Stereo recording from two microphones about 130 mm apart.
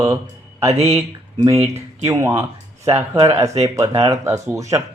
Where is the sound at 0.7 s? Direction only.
50° right (ahead or behind).